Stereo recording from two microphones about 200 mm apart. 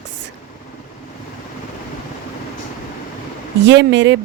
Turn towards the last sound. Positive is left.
turn(degrees=-60)  # may be behind; listen again after turning